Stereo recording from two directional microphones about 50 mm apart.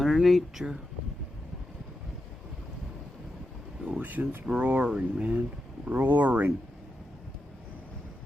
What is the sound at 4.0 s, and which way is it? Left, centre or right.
Speech, right.